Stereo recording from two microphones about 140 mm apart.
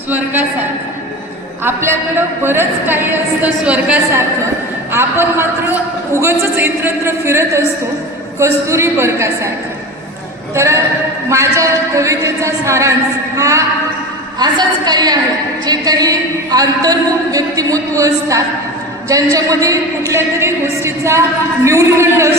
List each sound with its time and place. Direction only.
1.6 s a woman's voice: 15° right (ahead or behind)
10.5 s a woman's voice: 20° right (ahead or behind)